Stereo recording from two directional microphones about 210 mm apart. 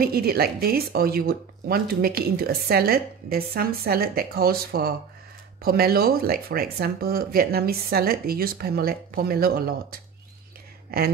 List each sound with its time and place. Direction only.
0.0 s speech: 45° right (ahead or behind)